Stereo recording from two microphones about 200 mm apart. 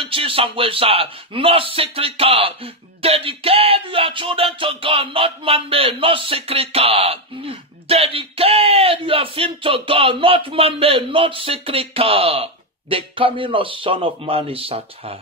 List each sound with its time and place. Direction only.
0.0 s speech: 25° right (ahead or behind)